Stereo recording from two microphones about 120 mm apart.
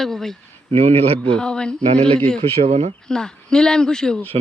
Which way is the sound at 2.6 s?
65° right (ahead or behind).